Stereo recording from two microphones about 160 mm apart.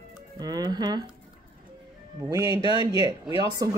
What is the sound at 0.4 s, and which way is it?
Speech, 25° right (ahead or behind).